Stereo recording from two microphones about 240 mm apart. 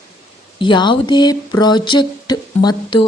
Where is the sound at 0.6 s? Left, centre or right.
Centre.